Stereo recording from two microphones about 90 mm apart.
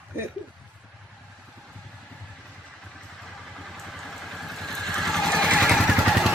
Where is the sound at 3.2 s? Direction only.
Centre (ahead or behind).